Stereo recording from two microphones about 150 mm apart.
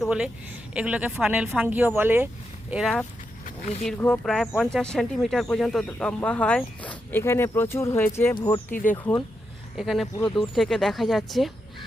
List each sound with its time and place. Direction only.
0.0 s a woman's voice: 5° right (ahead or behind)
2.8 s speech: 10° left (ahead or behind)
8.4 s speech: 30° left (ahead or behind)
8.7 s speech: 60° left (ahead or behind)
9.7 s speech: centre (ahead or behind)